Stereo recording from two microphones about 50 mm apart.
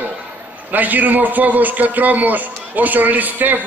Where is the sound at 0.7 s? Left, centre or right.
Right.